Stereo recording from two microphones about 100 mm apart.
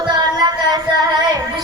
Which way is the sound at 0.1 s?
45° right (ahead or behind).